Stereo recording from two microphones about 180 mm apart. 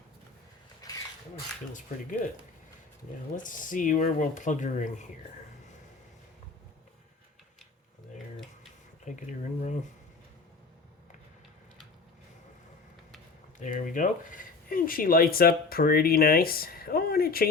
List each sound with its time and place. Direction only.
0.8 s a sound: 20° left (ahead or behind)
3.3 s speech: 45° left (ahead or behind)
9.0 s speech: 40° left (ahead or behind)
13.6 s speech: 45° left (ahead or behind)